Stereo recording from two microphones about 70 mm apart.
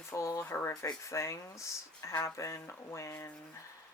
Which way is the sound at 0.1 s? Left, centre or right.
Left.